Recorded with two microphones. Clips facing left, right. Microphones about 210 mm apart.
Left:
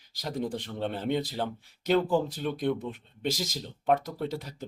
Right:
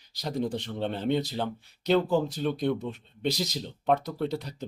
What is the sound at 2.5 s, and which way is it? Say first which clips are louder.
Speech: right 1 dB; 50° left (ahead or behind).